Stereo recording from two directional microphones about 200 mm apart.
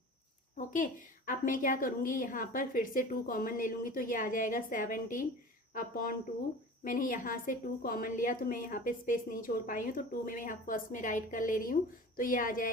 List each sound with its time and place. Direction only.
0.5 s a woman's voice: 40° left (ahead or behind)